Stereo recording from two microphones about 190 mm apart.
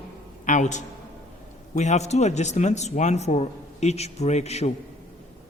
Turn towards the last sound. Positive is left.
turn(degrees=35)  # may be behind; listen again after turning